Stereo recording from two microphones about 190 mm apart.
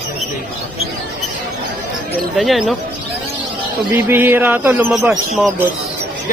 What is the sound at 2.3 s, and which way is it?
Speech, centre (ahead or behind).